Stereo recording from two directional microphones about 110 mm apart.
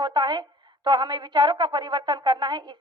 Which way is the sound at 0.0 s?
40° right (ahead or behind).